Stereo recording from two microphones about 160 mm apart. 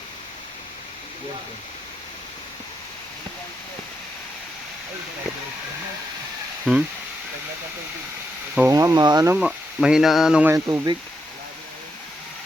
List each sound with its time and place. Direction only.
6.7 s speech: 10° right (ahead or behind)
8.7 s speech: 20° right (ahead or behind)
9.3 s speech: 5° right (ahead or behind)
10.5 s speech: 20° right (ahead or behind)